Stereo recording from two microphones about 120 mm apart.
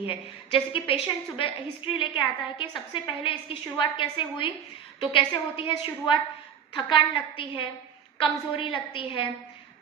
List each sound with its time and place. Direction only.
0.1 s a woman's voice: 50° left (ahead or behind)